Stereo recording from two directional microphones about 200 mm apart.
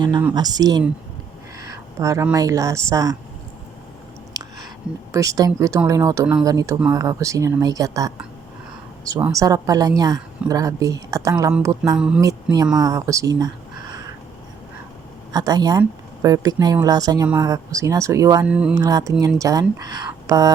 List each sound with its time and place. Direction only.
0.3 s speech: 20° right (ahead or behind)
2.0 s speech: 15° right (ahead or behind)
4.4 s whispering: 20° right (ahead or behind)
5.1 s speech: 15° right (ahead or behind)
12.2 s speech: 20° right (ahead or behind)
15.3 s speech: 20° right (ahead or behind)
18.4 s speech: 5° right (ahead or behind)
18.8 s speech: 20° right (ahead or behind)